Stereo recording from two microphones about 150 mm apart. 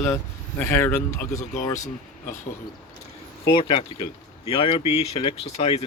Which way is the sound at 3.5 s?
35° left (ahead or behind).